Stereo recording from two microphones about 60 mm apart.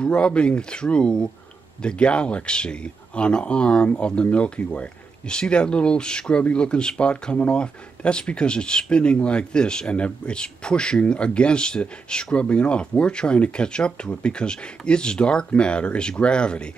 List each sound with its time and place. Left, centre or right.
0.0 s speech: centre